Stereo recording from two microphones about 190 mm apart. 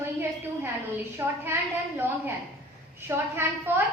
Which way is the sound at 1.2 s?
10° right (ahead or behind).